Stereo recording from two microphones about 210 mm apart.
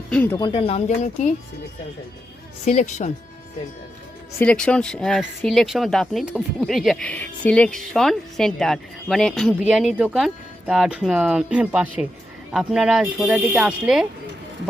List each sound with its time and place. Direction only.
0.1 s speech: 5° left (ahead or behind)
0.3 s speech: 25° left (ahead or behind)
2.6 s speech: 35° left (ahead or behind)
4.4 s speech: 5° left (ahead or behind)